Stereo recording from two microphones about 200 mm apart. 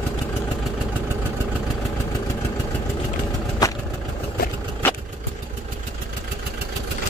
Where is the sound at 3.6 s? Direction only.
20° left (ahead or behind).